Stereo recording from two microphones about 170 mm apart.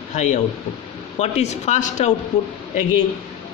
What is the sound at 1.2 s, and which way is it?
Speech, 40° left (ahead or behind).